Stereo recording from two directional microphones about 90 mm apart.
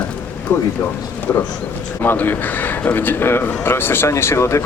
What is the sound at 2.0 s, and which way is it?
Speech, 20° left (ahead or behind).